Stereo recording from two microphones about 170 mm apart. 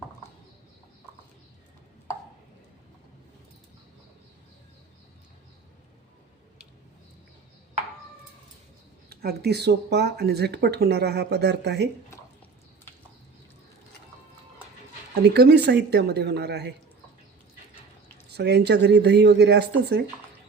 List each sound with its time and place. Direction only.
9.0 s speech: 70° right (ahead or behind)
15.1 s speech: 75° right (ahead or behind)
18.3 s speech: 75° right (ahead or behind)